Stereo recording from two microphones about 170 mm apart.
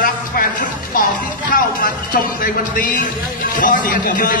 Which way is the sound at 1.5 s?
55° left (ahead or behind).